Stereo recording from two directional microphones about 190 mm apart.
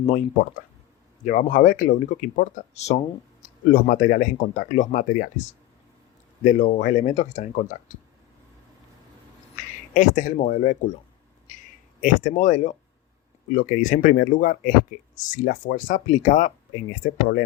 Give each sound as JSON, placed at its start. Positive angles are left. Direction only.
{"t": 0.0, "sound": "speech", "side_deg": 45}
{"t": 9.9, "sound": "speech", "side_deg": 45}
{"t": 11.5, "sound": "a sound", "side_deg": 40}
{"t": 11.9, "sound": "speech", "side_deg": 45}